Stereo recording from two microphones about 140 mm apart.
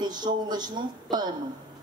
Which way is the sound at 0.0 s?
30° right (ahead or behind).